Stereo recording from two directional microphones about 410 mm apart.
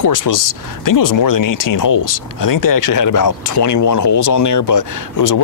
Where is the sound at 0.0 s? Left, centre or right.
Left.